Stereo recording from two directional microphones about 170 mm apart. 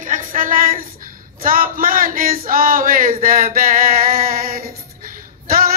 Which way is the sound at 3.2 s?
55° right (ahead or behind).